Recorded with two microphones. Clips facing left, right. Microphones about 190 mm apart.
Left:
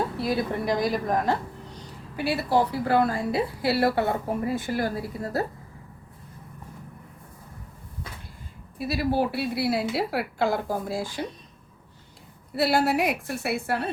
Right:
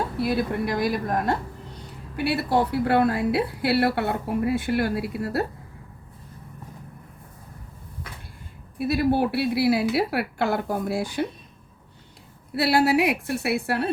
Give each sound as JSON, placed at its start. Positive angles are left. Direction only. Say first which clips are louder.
{"t": 0.2, "sound": "a woman's voice", "louder": "right 2 dB", "side_deg": -60}
{"t": 2.1, "sound": "a woman's voice", "louder": "right 1 dB", "side_deg": -65}
{"t": 8.8, "sound": "a woman's voice", "louder": "right 3 dB", "side_deg": -60}
{"t": 12.5, "sound": "a woman's voice", "louder": "right 2 dB", "side_deg": -65}